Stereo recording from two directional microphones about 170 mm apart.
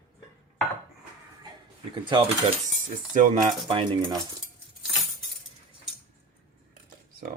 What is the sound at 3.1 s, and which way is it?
Speech, 50° right (ahead or behind).